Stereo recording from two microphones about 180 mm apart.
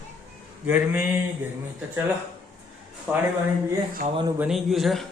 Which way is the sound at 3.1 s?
5° right (ahead or behind).